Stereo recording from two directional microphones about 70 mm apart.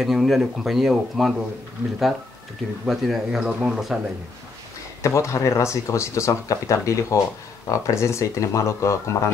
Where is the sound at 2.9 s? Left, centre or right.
Centre.